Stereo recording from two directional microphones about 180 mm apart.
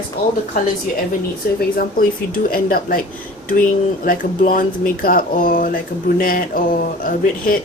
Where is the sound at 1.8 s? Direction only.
50° left (ahead or behind).